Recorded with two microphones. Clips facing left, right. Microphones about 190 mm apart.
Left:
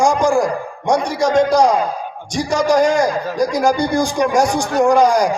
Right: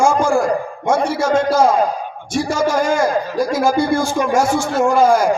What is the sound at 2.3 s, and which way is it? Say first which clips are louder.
A man's voice: left 2 dB; 5° right (ahead or behind).